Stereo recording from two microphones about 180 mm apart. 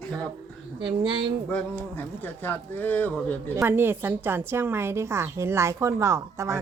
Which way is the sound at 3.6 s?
10° right (ahead or behind).